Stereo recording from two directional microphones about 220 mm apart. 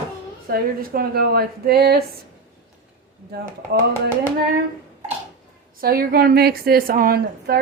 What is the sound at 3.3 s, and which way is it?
Speech, 45° right (ahead or behind).